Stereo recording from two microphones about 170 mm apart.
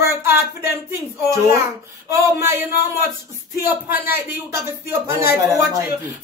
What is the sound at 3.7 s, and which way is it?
Speech, 10° right (ahead or behind).